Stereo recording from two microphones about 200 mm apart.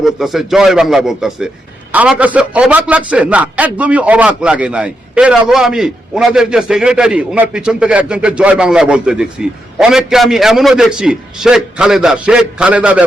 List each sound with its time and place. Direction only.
0.0 s a man's voice: centre (ahead or behind)